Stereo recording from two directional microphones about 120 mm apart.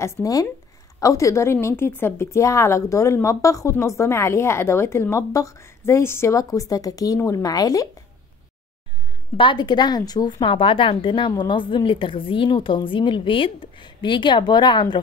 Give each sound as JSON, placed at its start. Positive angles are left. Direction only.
{"t": 0.0, "sound": "speech", "side_deg": 25}
{"t": 9.4, "sound": "a woman's voice", "side_deg": 40}